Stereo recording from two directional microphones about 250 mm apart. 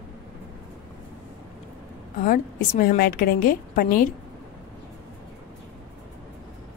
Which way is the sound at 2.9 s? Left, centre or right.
Left.